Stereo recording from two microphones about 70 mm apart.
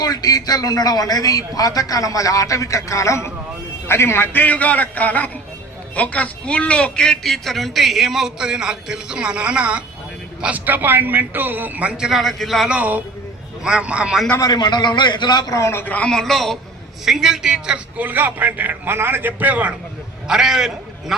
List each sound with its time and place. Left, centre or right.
0.0 s a man's voice: left; by 12.6 s centre
12.6 s a man's voice: centre
14.5 s a man's voice: left
15.5 s a man's voice: left
15.8 s a man's voice: left
16.0 s a man's voice: centre
17.9 s a man's voice: right
20.2 s a man's voice: centre